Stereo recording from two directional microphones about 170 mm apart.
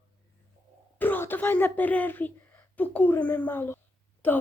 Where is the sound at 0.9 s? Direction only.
10° left (ahead or behind).